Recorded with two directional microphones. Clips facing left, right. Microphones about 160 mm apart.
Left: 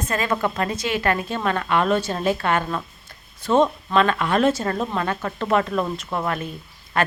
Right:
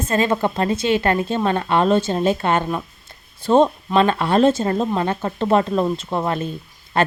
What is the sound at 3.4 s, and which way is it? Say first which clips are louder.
Speech: right 3 dB; 30° right (ahead or behind).